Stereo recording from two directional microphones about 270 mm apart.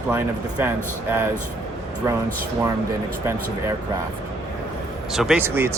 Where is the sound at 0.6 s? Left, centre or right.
Centre.